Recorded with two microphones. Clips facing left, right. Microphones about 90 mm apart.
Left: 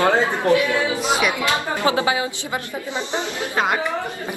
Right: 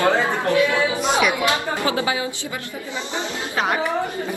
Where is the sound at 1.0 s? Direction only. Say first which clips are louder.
Right 2 dB; centre (ahead or behind).